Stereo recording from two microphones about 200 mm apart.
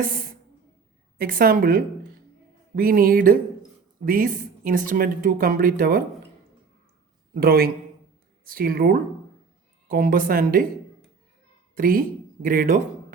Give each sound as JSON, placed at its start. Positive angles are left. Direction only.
{"t": 1.2, "sound": "speech", "side_deg": -45}
{"t": 7.3, "sound": "speech", "side_deg": -50}
{"t": 11.7, "sound": "a woman's voice", "side_deg": -45}